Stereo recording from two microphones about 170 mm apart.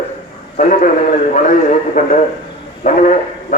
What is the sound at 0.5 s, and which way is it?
Speech, 50° left (ahead or behind).